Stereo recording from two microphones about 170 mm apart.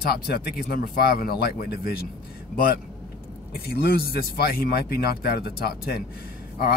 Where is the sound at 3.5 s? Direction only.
65° left (ahead or behind).